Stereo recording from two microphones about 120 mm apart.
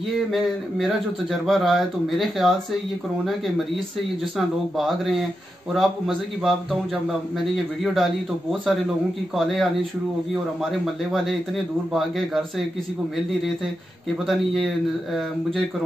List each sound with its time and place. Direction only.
0.1 s speech: centre (ahead or behind)
14.2 s speech: centre (ahead or behind)